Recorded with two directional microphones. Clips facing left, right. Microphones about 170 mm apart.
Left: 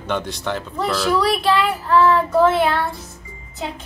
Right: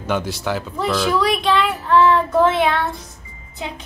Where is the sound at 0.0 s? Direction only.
5° right (ahead or behind).